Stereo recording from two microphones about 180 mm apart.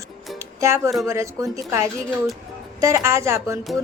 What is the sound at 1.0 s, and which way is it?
A woman's voice, 15° right (ahead or behind).